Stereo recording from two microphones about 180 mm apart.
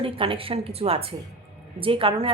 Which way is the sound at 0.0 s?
30° right (ahead or behind).